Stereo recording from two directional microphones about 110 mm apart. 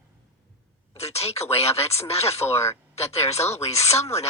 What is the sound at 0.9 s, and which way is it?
Speech, 70° left (ahead or behind).